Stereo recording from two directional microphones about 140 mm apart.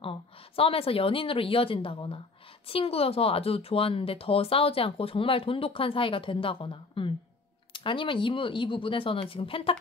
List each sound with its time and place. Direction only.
0.6 s speech: 40° left (ahead or behind)